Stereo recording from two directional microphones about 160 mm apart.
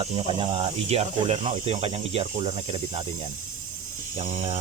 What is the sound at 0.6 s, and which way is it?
Speech, 45° right (ahead or behind).